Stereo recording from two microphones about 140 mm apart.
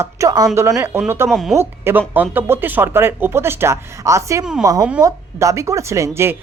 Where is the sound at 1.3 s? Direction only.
Centre (ahead or behind).